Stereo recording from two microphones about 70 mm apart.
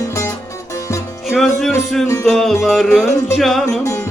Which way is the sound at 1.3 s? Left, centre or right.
Centre.